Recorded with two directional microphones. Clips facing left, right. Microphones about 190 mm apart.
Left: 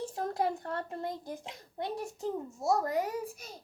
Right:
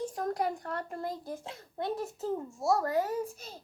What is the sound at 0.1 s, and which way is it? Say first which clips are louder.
A child's voice: even; 25° left (ahead or behind).